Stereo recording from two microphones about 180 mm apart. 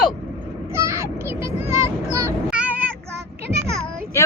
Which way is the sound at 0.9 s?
15° right (ahead or behind).